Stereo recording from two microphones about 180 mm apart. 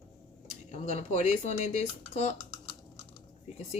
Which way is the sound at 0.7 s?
40° left (ahead or behind).